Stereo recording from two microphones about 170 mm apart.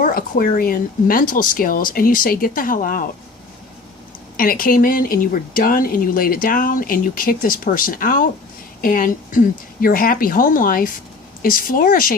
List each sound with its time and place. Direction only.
0.0 s speech: 55° left (ahead or behind)
4.4 s speech: 55° left (ahead or behind)